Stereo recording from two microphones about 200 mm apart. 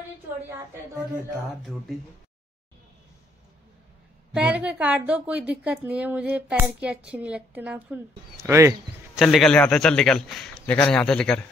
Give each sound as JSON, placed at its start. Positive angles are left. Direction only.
{"t": 4.3, "sound": "a woman's voice", "side_deg": -5}
{"t": 9.2, "sound": "a man's voice", "side_deg": 0}